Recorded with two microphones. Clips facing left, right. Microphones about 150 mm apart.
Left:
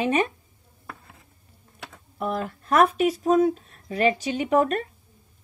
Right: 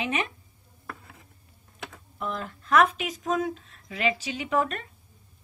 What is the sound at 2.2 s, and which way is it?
Speech, 45° left (ahead or behind).